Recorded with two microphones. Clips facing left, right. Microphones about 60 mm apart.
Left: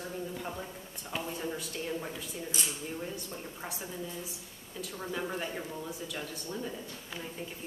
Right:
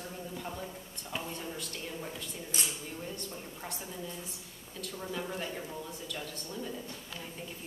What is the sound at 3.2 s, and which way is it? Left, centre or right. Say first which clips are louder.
Speech: left 1 dB; centre.